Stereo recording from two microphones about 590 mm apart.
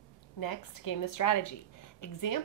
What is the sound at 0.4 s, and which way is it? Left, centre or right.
A woman's voice, left.